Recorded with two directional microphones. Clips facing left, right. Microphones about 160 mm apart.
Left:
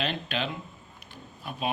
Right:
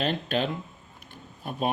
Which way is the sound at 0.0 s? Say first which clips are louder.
Right 4 dB; 45° right (ahead or behind).